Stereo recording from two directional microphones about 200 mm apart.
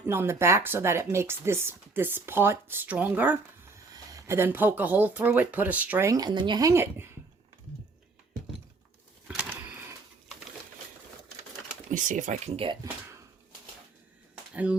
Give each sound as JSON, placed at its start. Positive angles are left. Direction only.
{"t": 0.0, "sound": "speech", "side_deg": -10}
{"t": 9.2, "sound": "bird", "side_deg": -5}
{"t": 11.9, "sound": "speech", "side_deg": -40}
{"t": 14.5, "sound": "speech", "side_deg": -5}